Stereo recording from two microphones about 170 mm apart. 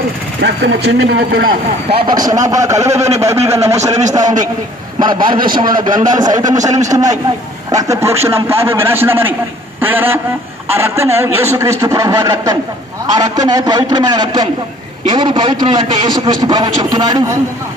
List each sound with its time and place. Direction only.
0.4 s speech: 85° right; by 1.5 s 60° right (ahead or behind)
1.9 s a man's voice: 30° right (ahead or behind)